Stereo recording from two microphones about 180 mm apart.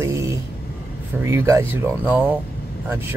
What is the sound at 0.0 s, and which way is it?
Vehicle, 15° right (ahead or behind).